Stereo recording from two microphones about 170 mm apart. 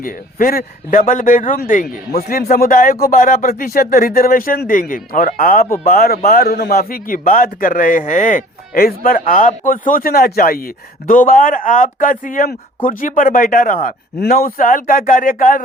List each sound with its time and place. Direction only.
0.0 s a man's voice: 55° left (ahead or behind)